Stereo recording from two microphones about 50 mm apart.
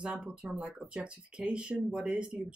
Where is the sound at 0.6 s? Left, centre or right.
Right.